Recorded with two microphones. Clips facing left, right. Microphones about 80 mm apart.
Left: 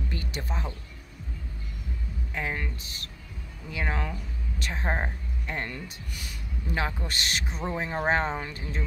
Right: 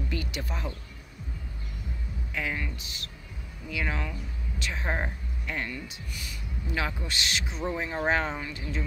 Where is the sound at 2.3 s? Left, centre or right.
Left.